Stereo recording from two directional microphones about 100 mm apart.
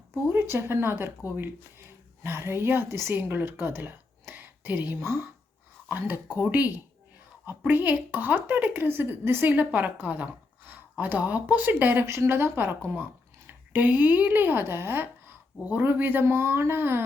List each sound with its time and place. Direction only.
0.3 s a woman's voice: 25° right (ahead or behind)
2.2 s a woman's voice: 25° right (ahead or behind)